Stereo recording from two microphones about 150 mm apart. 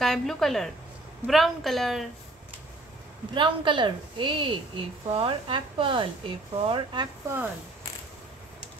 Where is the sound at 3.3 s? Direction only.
35° right (ahead or behind).